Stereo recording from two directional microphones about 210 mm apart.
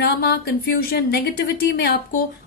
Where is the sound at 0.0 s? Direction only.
50° left (ahead or behind).